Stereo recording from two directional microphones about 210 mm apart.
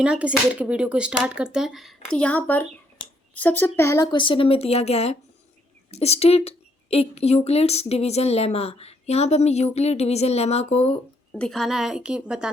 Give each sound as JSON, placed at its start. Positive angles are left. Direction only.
{"t": 0.0, "sound": "speech", "side_deg": -5}
{"t": 3.0, "sound": "a sound", "side_deg": 25}
{"t": 3.3, "sound": "speech", "side_deg": 10}
{"t": 11.3, "sound": "speech", "side_deg": 5}